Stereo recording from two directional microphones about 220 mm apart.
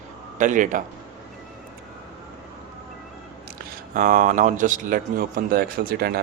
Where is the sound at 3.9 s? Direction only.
35° right (ahead or behind).